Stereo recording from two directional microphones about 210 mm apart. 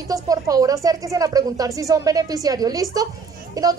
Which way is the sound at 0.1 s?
15° right (ahead or behind).